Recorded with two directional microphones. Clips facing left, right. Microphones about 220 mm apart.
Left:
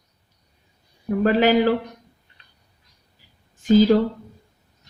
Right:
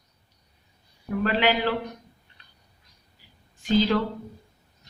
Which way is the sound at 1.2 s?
45° left (ahead or behind).